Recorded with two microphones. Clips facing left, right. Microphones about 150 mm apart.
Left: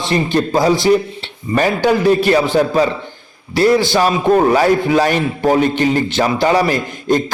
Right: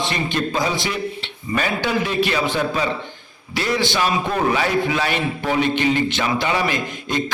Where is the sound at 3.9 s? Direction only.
40° left (ahead or behind).